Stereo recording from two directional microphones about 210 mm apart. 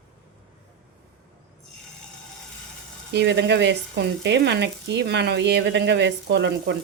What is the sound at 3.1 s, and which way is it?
Speech, 55° right (ahead or behind).